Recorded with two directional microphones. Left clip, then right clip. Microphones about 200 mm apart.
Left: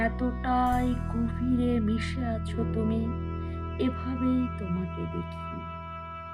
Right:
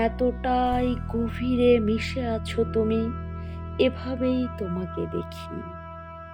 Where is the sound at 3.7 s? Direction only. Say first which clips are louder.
Right 8 dB; 25° right (ahead or behind).